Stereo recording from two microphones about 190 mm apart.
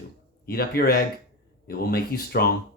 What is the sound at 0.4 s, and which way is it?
Speech, 55° left (ahead or behind).